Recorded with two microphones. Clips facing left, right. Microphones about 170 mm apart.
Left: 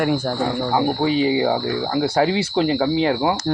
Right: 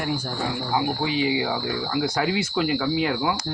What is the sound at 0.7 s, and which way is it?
Speech, 40° left (ahead or behind).